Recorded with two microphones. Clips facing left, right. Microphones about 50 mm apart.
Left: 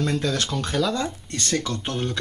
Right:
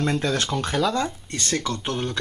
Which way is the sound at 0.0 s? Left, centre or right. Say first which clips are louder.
Right 1 dB; right.